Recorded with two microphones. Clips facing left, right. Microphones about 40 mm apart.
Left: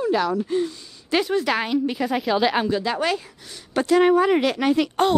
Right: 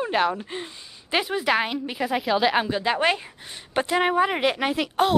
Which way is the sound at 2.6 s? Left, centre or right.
Right.